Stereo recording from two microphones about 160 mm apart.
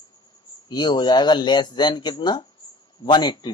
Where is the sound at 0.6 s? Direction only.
25° left (ahead or behind).